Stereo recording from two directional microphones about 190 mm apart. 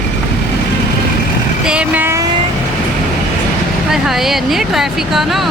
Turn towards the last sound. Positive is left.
turn(degrees=0)  # may be behind; listen again after turning